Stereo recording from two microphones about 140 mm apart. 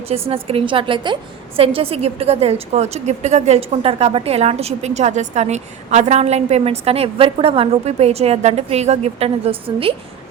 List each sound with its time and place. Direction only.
0.1 s a woman's voice: 45° right (ahead or behind)